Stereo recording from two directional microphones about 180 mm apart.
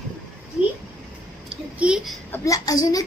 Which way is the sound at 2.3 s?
20° left (ahead or behind).